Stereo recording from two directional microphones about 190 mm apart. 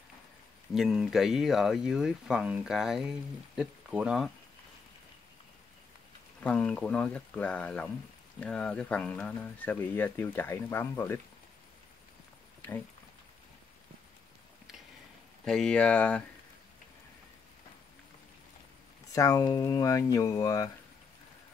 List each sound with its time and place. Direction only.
0.7 s speech: centre (ahead or behind)
6.4 s speech: 5° left (ahead or behind)
15.4 s speech: 5° left (ahead or behind)
19.1 s speech: 20° left (ahead or behind)